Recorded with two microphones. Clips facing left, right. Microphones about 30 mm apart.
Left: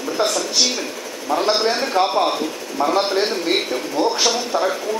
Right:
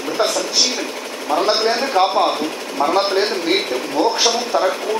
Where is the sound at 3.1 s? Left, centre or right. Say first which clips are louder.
Right 2 dB; right.